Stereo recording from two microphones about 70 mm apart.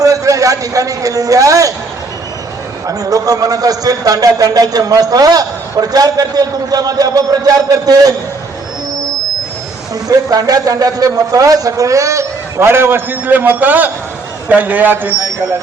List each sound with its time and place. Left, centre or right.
0.0 s a sound: right
2.8 s a man's voice: right
9.9 s a man's voice: right